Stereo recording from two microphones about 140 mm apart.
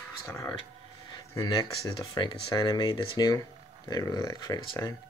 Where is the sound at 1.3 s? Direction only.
25° left (ahead or behind).